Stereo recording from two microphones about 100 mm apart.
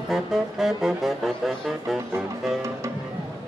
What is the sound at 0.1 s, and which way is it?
Music, centre (ahead or behind).